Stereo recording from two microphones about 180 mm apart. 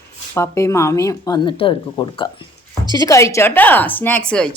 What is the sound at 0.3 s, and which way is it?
Speech, 15° left (ahead or behind).